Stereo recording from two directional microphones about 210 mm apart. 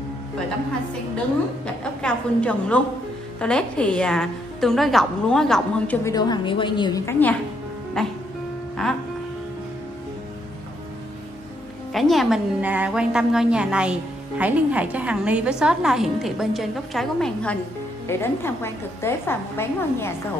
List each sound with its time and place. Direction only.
2.0 s a woman's voice: 5° left (ahead or behind)
6.0 s a woman's voice: 20° left (ahead or behind); by 9.0 s centre (ahead or behind)
11.9 s a woman's voice: centre (ahead or behind)